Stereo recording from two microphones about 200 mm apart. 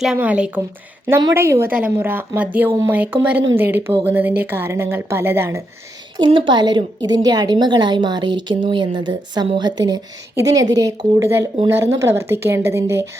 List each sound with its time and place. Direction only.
0.0 s a woman's voice: 5° right (ahead or behind)
6.1 s a woman's voice: 25° right (ahead or behind)